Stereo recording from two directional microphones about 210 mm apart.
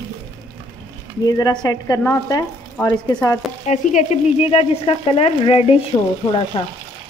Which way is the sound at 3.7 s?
30° left (ahead or behind).